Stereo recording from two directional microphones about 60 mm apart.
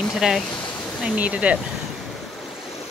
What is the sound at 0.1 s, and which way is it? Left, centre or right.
Speech, centre.